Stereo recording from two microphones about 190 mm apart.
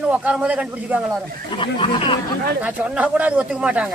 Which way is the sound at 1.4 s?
25° left (ahead or behind).